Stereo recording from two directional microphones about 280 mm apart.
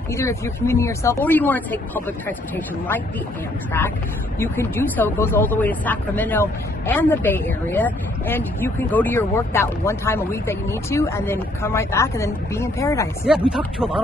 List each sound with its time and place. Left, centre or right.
0.1 s speech: centre
4.4 s speech: centre
13.2 s speech: centre